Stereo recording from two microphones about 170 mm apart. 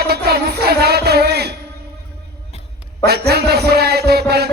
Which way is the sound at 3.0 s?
70° right (ahead or behind).